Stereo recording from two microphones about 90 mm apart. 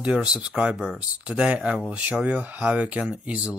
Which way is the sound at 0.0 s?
10° right (ahead or behind).